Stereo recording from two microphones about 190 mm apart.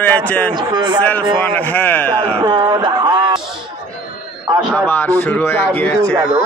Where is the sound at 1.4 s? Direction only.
10° left (ahead or behind).